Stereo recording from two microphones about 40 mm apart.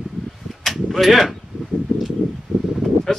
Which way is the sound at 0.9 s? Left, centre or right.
Centre.